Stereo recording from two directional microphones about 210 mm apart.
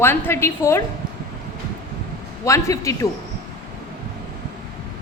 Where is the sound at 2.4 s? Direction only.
15° left (ahead or behind).